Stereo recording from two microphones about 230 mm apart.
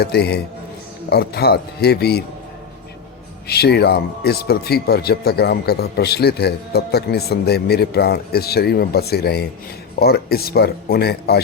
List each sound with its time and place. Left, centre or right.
0.0 s speech: left
3.4 s speech: left